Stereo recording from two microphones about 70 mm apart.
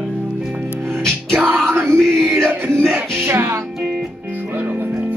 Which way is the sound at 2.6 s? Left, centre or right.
Right.